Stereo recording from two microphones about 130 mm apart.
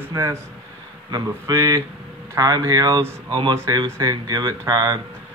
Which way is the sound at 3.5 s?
20° right (ahead or behind).